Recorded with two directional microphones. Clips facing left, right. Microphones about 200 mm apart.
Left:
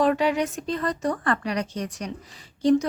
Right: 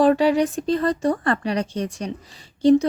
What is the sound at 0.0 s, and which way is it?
Speech, 35° right (ahead or behind).